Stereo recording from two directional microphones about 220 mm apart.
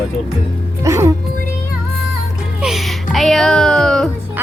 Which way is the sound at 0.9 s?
15° right (ahead or behind).